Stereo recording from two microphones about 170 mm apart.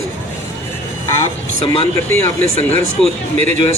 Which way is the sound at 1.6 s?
35° left (ahead or behind).